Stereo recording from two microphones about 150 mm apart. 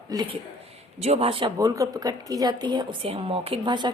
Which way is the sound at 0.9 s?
45° right (ahead or behind).